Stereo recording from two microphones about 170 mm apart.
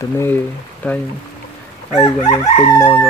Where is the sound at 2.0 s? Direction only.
35° left (ahead or behind).